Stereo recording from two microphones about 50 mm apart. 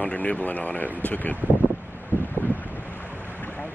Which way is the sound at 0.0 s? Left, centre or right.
Left.